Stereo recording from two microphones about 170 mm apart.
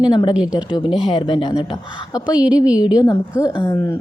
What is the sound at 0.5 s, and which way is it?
Speech, 25° left (ahead or behind).